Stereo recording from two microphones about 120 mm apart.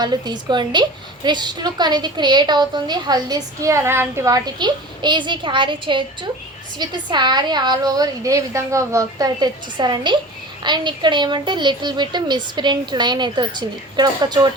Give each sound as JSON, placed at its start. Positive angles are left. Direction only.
{"t": 0.0, "sound": "a woman's voice", "side_deg": -35}